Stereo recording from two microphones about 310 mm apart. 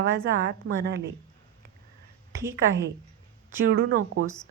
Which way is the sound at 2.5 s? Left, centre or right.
Right.